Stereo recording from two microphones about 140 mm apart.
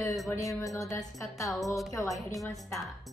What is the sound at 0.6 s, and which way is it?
Music, 20° left (ahead or behind).